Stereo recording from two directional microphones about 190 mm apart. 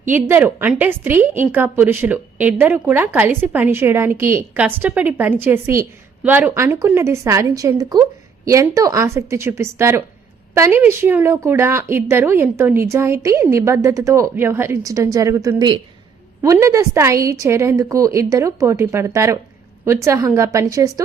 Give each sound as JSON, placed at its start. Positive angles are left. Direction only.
{"t": 0.1, "sound": "a woman's voice", "side_deg": -10}